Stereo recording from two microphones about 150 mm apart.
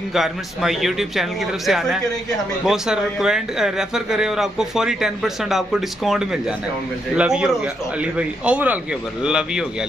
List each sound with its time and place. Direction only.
0.1 s speech: centre (ahead or behind)